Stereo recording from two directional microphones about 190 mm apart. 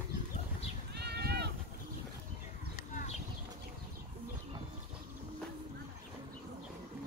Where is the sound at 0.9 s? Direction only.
55° right (ahead or behind).